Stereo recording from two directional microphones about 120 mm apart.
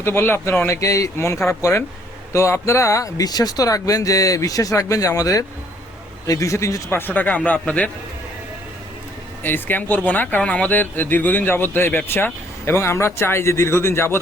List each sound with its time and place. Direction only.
0.0 s speech: 20° left (ahead or behind)
9.4 s speech: 15° left (ahead or behind)